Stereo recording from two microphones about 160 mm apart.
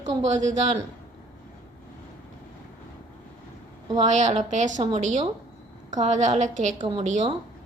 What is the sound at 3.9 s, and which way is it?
A woman's voice, 45° right (ahead or behind).